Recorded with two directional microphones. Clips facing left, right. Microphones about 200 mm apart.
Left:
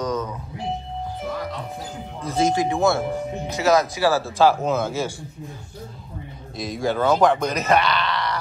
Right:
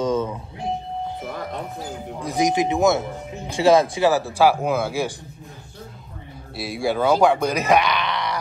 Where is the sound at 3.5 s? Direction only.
30° right (ahead or behind).